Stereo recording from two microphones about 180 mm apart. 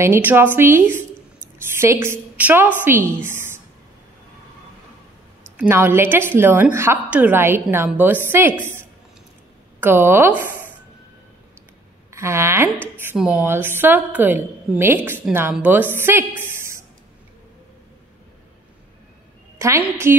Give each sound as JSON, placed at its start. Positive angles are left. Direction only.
{"t": 0.0, "sound": "a woman's voice", "side_deg": -10}
{"t": 5.6, "sound": "a woman's voice", "side_deg": -10}
{"t": 12.1, "sound": "a woman's voice", "side_deg": -15}
{"t": 19.6, "sound": "a woman's voice", "side_deg": -15}